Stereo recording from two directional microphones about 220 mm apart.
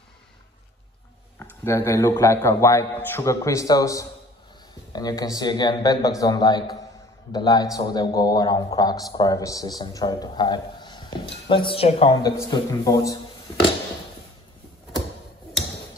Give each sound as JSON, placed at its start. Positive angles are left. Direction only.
{"t": 1.4, "sound": "a man's voice", "side_deg": 10}